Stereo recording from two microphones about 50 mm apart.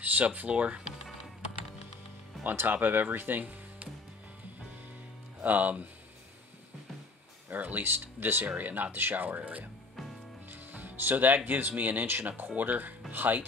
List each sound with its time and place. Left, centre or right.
0.0 s speech: right
2.5 s speech: right
5.4 s speech: right
7.5 s speech: right
10.5 s speech: right